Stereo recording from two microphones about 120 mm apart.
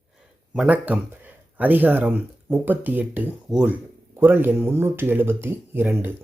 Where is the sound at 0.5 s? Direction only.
10° right (ahead or behind).